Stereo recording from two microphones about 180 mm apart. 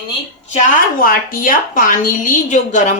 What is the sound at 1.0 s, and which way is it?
A woman's voice, 50° left (ahead or behind).